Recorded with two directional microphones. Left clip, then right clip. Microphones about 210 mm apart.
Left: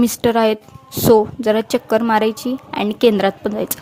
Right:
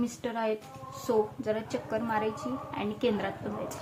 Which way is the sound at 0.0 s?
50° left (ahead or behind).